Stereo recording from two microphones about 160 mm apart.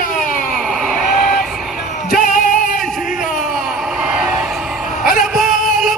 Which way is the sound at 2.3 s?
55° left (ahead or behind).